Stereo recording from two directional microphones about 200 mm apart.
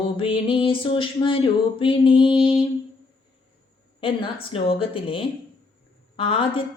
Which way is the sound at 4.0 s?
25° left (ahead or behind).